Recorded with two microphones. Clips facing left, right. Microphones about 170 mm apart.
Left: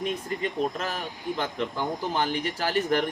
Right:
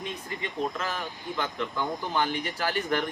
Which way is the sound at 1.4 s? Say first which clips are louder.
Even; 35° left (ahead or behind).